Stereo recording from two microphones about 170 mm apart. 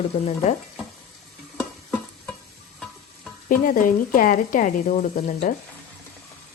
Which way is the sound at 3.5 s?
55° left (ahead or behind).